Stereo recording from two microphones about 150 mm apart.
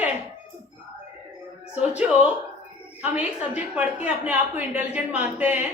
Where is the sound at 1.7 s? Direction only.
5° right (ahead or behind).